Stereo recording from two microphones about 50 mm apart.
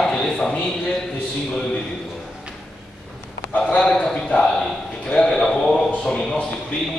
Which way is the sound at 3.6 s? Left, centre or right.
Centre.